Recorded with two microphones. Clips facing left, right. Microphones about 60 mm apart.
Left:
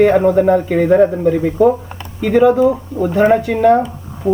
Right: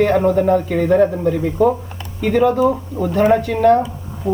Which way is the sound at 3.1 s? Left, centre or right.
Left.